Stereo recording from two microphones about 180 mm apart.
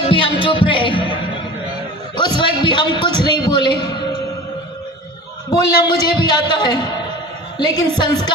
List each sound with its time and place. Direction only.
0.1 s music: 30° left (ahead or behind)
2.1 s a sound: 25° left (ahead or behind)
5.5 s a man's voice: 25° left (ahead or behind)